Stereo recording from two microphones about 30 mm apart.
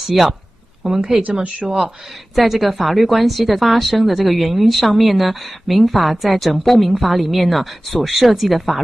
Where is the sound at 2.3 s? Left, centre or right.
Centre.